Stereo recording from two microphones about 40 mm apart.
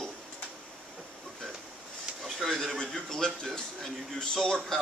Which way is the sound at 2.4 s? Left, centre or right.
Centre.